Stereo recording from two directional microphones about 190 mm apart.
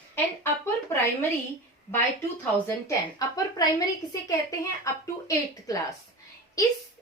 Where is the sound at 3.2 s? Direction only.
20° left (ahead or behind).